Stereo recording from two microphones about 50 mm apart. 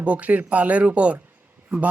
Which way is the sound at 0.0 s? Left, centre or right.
Right.